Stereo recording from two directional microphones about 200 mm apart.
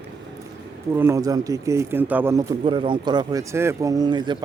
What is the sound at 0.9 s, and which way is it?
A man's voice, 15° right (ahead or behind).